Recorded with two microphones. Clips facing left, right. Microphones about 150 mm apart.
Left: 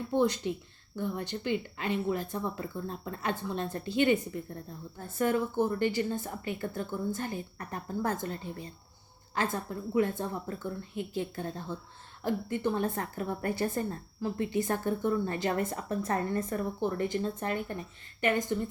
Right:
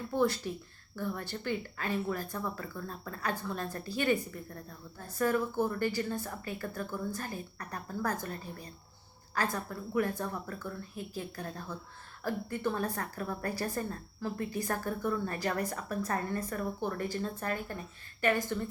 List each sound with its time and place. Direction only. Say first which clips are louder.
0.1 s speech: left 2 dB; 20° left (ahead or behind)